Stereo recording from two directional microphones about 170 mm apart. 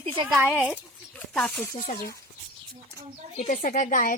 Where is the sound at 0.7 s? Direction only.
5° left (ahead or behind).